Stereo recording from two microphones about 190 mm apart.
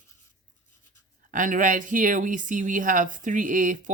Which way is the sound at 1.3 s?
45° right (ahead or behind).